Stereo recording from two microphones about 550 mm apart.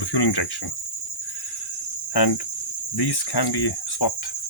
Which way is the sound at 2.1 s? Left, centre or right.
Left.